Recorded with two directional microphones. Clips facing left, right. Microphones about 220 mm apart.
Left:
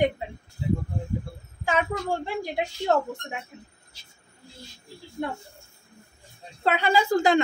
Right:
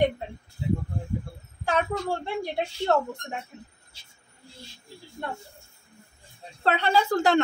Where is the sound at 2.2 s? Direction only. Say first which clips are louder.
Even; 10° left (ahead or behind).